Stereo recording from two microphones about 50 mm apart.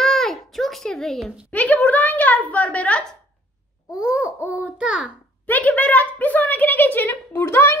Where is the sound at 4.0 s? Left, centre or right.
Centre.